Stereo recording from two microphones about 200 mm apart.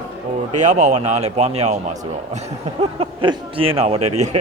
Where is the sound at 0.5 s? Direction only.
35° right (ahead or behind).